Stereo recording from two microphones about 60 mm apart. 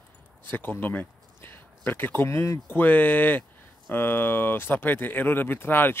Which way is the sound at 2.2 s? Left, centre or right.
Left.